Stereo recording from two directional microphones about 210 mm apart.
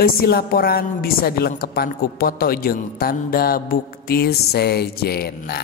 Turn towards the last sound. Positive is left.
turn(degrees=50)  # may be behind; listen again after turning